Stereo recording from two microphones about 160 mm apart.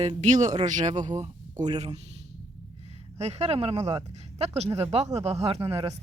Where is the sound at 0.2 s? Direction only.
50° right (ahead or behind).